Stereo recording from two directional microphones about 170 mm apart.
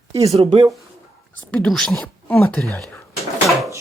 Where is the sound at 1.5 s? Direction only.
5° left (ahead or behind).